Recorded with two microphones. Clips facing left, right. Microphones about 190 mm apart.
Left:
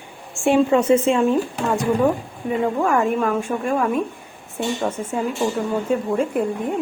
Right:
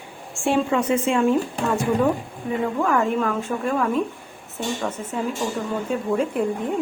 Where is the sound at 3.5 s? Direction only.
25° left (ahead or behind).